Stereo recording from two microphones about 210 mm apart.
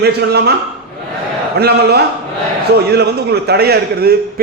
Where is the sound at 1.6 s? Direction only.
50° right (ahead or behind).